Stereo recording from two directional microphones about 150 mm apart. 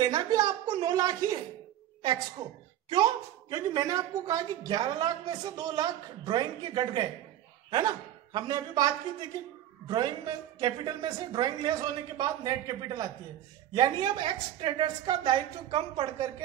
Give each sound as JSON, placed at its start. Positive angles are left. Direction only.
{"t": 0.0, "sound": "a woman's voice", "side_deg": -25}
{"t": 2.9, "sound": "a woman's voice", "side_deg": -30}